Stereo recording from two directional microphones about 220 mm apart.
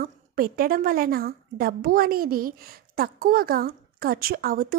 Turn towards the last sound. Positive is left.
turn(degrees=-40)  # may be behind; listen again after turning